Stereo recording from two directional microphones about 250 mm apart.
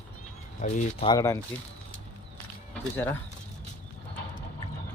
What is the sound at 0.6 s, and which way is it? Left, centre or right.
Speech, left.